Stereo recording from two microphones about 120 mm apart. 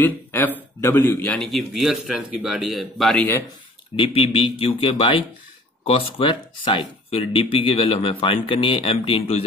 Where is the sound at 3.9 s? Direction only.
50° left (ahead or behind).